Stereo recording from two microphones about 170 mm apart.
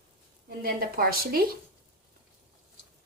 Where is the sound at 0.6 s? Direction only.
60° right (ahead or behind).